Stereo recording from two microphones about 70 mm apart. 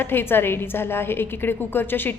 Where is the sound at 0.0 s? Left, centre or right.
Left.